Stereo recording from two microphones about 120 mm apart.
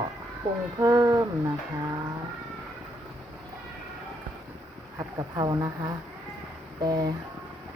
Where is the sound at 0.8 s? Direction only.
30° right (ahead or behind).